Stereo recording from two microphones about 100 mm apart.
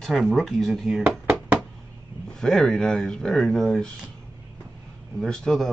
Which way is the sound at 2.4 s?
5° left (ahead or behind).